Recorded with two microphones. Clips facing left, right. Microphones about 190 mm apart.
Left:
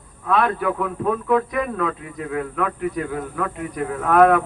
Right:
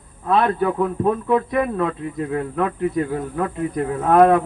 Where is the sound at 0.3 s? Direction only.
30° right (ahead or behind).